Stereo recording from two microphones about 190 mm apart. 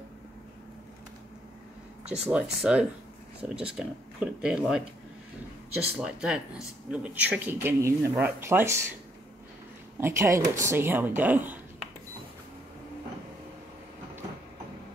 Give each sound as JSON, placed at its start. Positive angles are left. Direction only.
{"t": 2.0, "sound": "speech", "side_deg": -5}
{"t": 5.9, "sound": "speech", "side_deg": -5}
{"t": 9.9, "sound": "speech", "side_deg": -15}